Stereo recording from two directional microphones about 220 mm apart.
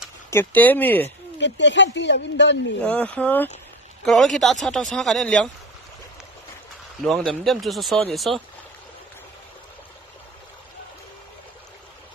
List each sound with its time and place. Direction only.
0.3 s speech: 10° left (ahead or behind)
1.4 s speech: 55° left (ahead or behind)
2.8 s speech: 5° left (ahead or behind)
7.1 s speech: centre (ahead or behind)